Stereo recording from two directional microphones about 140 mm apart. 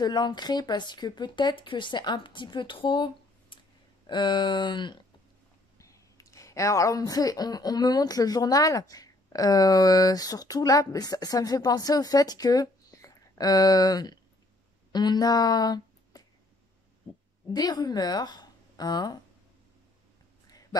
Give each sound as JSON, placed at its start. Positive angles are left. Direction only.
{"t": 0.0, "sound": "speech", "side_deg": 30}
{"t": 5.8, "sound": "speech", "side_deg": 25}
{"t": 17.5, "sound": "speech", "side_deg": 30}